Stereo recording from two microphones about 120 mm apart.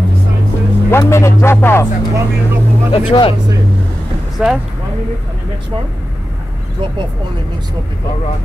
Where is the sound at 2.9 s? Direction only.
50° left (ahead or behind).